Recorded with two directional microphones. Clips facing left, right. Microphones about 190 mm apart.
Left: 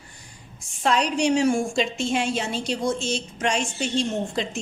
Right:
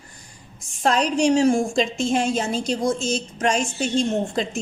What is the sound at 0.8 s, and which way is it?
A woman's voice, 45° right (ahead or behind).